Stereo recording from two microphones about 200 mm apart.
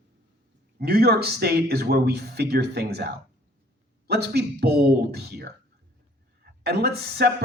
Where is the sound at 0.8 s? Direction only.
50° right (ahead or behind).